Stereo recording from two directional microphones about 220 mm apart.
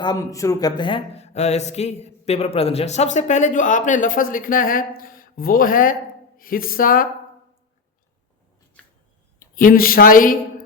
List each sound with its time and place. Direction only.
0.0 s speech: 15° left (ahead or behind); by 7.1 s 40° left (ahead or behind)
9.6 s speech: 40° left (ahead or behind)